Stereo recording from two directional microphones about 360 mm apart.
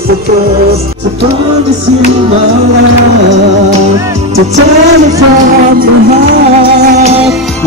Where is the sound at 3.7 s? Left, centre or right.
Centre.